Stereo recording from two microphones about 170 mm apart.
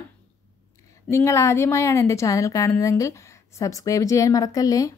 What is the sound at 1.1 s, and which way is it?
Speech, 15° left (ahead or behind).